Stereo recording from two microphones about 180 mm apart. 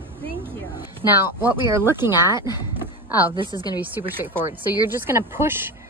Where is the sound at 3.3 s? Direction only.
25° right (ahead or behind).